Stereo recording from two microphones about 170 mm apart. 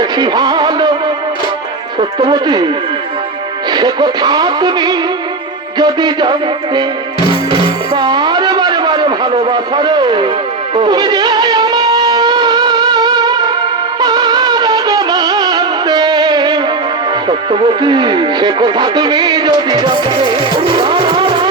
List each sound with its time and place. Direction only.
0.0 s music: 25° right (ahead or behind)
2.0 s speech: 30° right (ahead or behind)
3.7 s speech: 25° right (ahead or behind)
7.9 s a sound: 25° right (ahead or behind)
10.8 s music: 25° right (ahead or behind)
17.2 s speech: 30° right (ahead or behind)
20.7 s music: 25° right (ahead or behind)